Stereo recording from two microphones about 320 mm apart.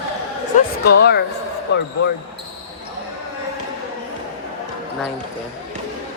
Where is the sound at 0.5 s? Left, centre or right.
Left.